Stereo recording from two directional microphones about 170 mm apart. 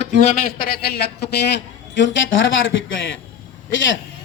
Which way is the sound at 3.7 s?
90° left.